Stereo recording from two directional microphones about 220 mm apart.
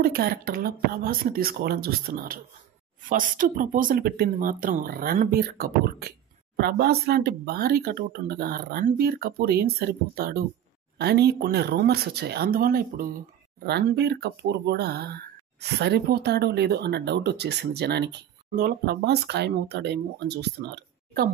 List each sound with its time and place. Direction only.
0.0 s speech: 40° right (ahead or behind)